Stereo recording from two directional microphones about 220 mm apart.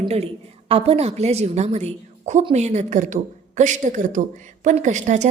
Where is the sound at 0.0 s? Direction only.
30° right (ahead or behind).